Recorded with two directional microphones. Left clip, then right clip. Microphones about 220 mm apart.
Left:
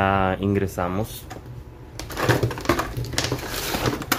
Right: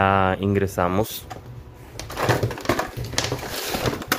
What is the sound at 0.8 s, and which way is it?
Speech, 35° right (ahead or behind).